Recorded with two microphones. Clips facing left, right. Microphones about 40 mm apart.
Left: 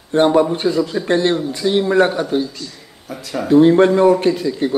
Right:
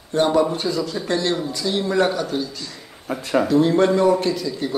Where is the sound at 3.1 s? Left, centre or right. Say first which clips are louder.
Right 5 dB; right.